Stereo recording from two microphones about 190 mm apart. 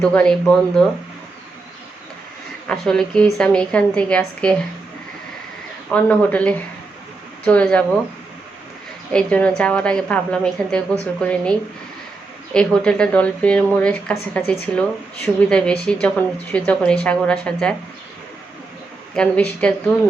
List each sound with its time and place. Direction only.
0.0 s speech: 5° left (ahead or behind)
2.6 s speech: 5° left (ahead or behind)
5.9 s speech: 5° left (ahead or behind)
9.1 s speech: 5° left (ahead or behind)
12.5 s speech: 5° left (ahead or behind)
19.1 s speech: 5° left (ahead or behind)